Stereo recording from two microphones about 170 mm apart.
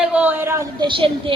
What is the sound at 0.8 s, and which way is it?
Speech, 30° right (ahead or behind).